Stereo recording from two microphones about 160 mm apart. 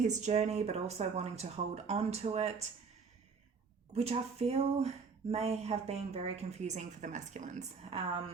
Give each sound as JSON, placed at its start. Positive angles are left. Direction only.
{"t": 0.0, "sound": "speech", "side_deg": -50}
{"t": 3.9, "sound": "a woman's voice", "side_deg": -40}